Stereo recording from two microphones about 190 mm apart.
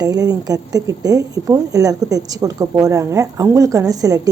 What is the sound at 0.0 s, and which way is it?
Speech, 20° right (ahead or behind).